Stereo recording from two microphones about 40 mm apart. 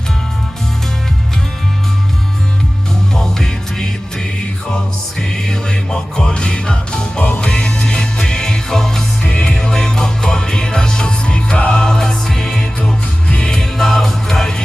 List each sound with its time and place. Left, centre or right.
3.2 s music: centre